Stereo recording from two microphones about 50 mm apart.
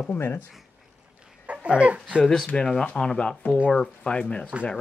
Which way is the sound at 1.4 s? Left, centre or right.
Right.